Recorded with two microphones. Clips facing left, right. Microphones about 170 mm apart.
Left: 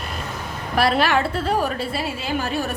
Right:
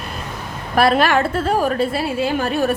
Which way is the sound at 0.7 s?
50° right (ahead or behind).